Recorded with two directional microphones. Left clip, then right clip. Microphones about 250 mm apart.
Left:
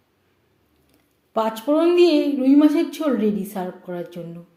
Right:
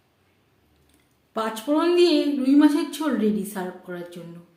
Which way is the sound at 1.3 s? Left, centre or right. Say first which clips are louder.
Left 4 dB; centre.